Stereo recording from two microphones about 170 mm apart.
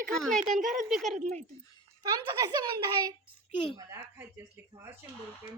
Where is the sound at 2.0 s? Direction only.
25° right (ahead or behind).